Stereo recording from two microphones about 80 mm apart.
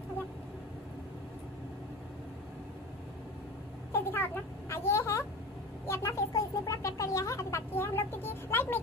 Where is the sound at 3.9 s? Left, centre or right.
Left.